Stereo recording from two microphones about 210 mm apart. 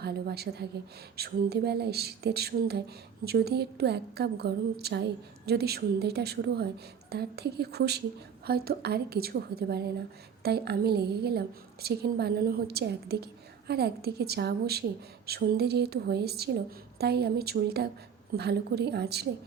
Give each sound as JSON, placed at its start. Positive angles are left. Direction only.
{"t": 0.0, "sound": "a woman's voice", "side_deg": -50}